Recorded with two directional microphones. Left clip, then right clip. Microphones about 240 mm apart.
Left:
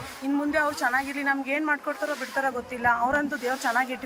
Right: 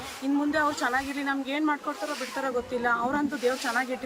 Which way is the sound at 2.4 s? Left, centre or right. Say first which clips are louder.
Left 2 dB; centre.